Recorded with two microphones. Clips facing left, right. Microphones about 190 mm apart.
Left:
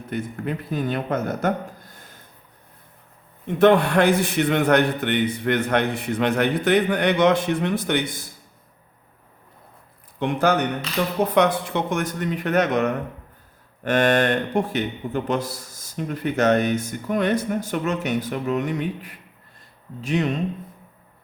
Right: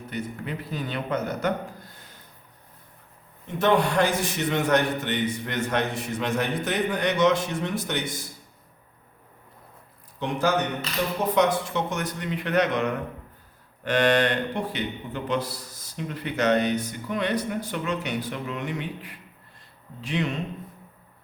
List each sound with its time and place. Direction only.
0.1 s a man's voice: 50° left (ahead or behind)
3.4 s a man's voice: 60° left (ahead or behind)
10.2 s a man's voice: 60° left (ahead or behind)